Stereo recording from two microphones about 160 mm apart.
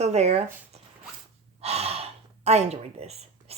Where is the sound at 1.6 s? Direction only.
40° right (ahead or behind).